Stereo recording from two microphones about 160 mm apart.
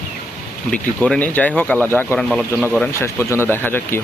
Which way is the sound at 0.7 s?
5° left (ahead or behind).